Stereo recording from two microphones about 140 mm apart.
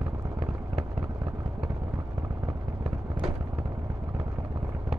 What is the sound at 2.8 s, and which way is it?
Vehicle, 40° right (ahead or behind).